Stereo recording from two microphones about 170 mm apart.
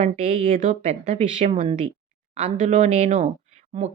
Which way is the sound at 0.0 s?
45° right (ahead or behind).